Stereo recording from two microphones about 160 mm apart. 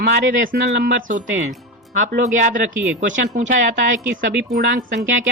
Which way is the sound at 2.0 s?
55° right (ahead or behind).